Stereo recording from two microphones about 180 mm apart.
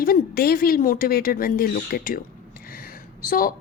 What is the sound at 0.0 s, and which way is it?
A woman's voice, 55° left (ahead or behind).